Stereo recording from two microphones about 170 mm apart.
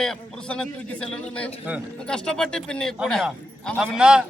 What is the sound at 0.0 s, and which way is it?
A man's voice, 5° left (ahead or behind).